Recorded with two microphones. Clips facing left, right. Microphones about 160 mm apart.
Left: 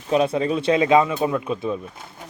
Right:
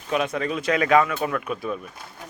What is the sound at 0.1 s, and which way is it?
Speech, 30° left (ahead or behind).